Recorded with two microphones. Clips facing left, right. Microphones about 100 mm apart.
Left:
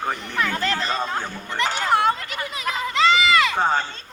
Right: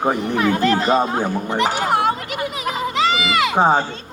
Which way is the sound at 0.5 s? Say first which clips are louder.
Right 8 dB; 40° right (ahead or behind).